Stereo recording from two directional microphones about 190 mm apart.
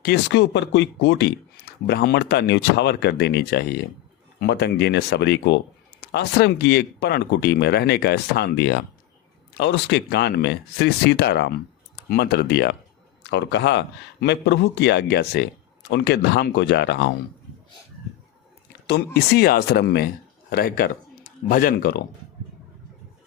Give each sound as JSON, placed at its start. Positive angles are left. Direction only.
{"t": 0.0, "sound": "speech", "side_deg": 65}
{"t": 18.9, "sound": "speech", "side_deg": 60}